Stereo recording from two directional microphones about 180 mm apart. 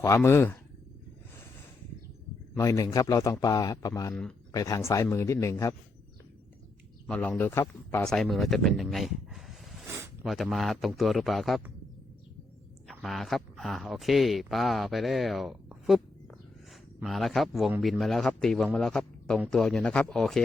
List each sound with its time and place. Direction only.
0.0 s speech: 15° left (ahead or behind)
2.6 s a man's voice: 20° left (ahead or behind)
4.1 s speech: 5° left (ahead or behind)
4.5 s speech: 20° left (ahead or behind)
7.1 s speech: 10° left (ahead or behind)
12.9 s speech: centre (ahead or behind)
17.0 s speech: centre (ahead or behind)